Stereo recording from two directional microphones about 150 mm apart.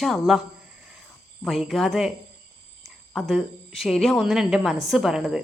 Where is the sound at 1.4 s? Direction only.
Centre (ahead or behind).